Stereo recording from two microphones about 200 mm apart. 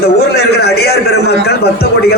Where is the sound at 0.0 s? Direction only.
55° left (ahead or behind).